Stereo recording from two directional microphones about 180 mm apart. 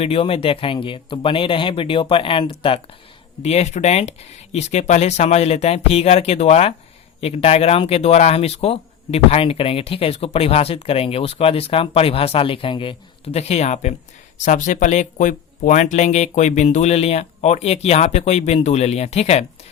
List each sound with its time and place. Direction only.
0.0 s speech: 30° left (ahead or behind)